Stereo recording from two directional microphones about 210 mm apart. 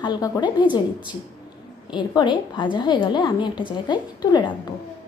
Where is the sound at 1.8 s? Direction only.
20° left (ahead or behind).